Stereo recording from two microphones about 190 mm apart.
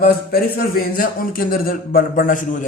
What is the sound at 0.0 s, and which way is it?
Speech, 55° left (ahead or behind).